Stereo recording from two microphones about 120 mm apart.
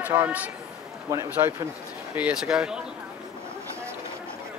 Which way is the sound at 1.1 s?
25° right (ahead or behind).